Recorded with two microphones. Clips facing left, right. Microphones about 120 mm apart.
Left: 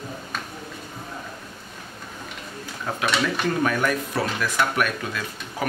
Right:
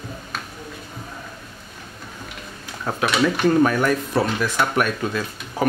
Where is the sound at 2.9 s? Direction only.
35° right (ahead or behind).